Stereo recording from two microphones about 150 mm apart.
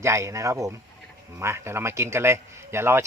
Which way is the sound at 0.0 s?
20° right (ahead or behind).